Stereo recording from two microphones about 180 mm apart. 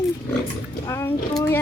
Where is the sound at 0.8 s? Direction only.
15° left (ahead or behind).